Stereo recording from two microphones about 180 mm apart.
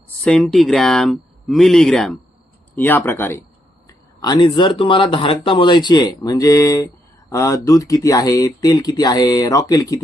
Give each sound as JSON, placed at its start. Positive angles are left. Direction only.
{"t": 0.3, "sound": "speech", "side_deg": 0}